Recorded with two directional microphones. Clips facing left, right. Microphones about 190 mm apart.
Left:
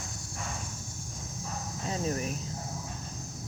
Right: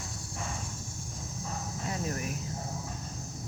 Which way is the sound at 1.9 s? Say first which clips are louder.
Left 3 dB; 25° left (ahead or behind).